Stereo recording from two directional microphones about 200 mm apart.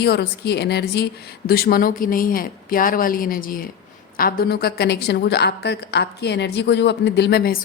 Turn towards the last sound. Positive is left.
turn(degrees=50)  # may be behind; listen again after turning